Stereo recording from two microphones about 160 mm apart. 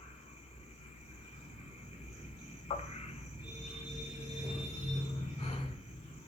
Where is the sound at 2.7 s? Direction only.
40° left (ahead or behind).